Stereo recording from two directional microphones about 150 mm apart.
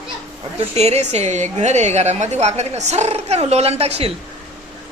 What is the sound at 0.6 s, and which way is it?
A woman's voice, 45° right (ahead or behind).